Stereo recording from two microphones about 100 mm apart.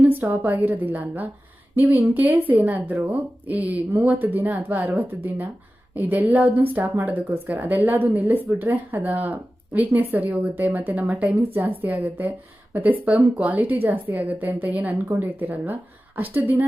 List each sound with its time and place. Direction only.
0.0 s a woman's voice: 20° right (ahead or behind)